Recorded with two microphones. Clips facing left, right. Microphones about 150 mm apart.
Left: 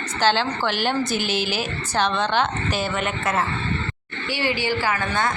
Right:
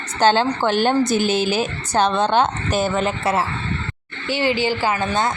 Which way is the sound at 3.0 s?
30° right (ahead or behind).